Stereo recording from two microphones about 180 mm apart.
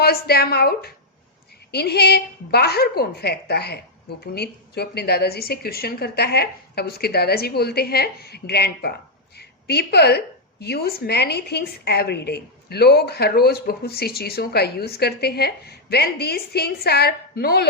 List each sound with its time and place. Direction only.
0.0 s a woman's voice: 60° left (ahead or behind)